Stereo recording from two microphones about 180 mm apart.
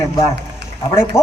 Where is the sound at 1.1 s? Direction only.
15° left (ahead or behind).